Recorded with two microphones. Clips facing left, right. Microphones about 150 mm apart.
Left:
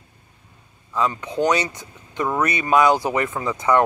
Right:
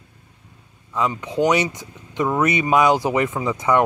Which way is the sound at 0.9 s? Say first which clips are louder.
Right 1 dB; 15° right (ahead or behind).